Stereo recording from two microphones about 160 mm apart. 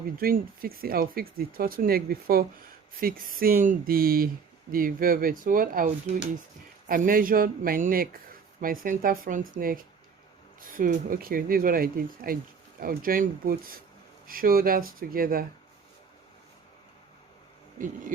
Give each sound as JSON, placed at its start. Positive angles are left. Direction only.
{"t": 0.2, "sound": "a man's voice", "side_deg": -65}